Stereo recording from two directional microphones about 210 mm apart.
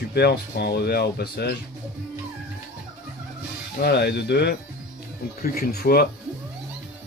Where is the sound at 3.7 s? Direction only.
50° left (ahead or behind).